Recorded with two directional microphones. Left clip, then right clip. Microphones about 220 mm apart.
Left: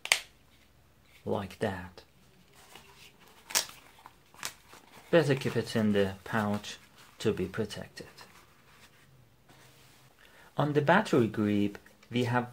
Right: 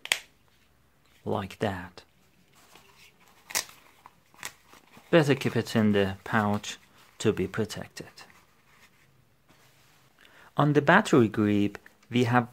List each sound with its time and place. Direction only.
1.2 s speech: 40° right (ahead or behind)
4.4 s walk: 10° right (ahead or behind)
5.1 s speech: 45° right (ahead or behind)
10.5 s speech: 45° right (ahead or behind)